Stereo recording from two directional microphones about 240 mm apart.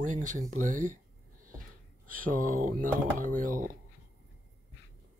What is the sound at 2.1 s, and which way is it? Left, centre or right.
Speech, right.